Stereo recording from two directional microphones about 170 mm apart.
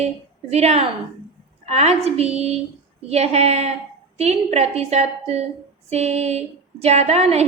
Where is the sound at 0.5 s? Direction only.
40° right (ahead or behind).